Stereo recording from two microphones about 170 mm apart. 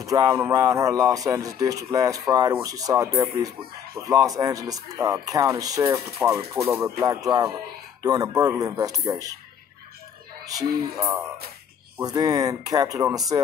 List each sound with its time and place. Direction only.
0.0 s speech: 20° right (ahead or behind)
10.4 s speech: 20° right (ahead or behind)